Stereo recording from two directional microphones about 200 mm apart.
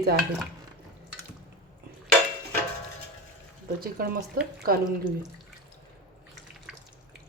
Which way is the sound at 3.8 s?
45° right (ahead or behind).